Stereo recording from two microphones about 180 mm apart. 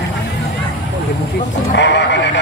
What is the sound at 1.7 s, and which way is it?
Speech, 75° left (ahead or behind).